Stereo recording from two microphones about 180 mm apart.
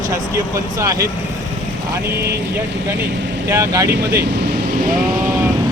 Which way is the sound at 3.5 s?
15° right (ahead or behind).